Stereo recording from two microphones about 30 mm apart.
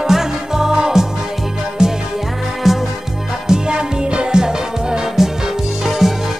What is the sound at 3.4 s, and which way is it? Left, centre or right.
Music, right.